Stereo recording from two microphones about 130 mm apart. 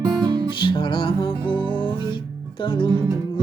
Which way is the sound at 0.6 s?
40° left (ahead or behind).